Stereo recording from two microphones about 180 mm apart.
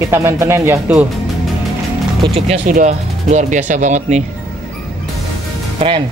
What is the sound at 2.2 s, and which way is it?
Speech, 30° right (ahead or behind).